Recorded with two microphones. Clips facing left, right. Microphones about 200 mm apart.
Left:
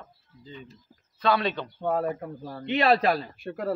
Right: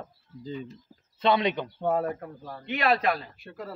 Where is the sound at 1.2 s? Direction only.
20° right (ahead or behind).